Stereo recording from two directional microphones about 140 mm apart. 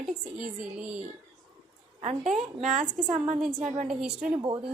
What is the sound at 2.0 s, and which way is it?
Speech, 55° right (ahead or behind).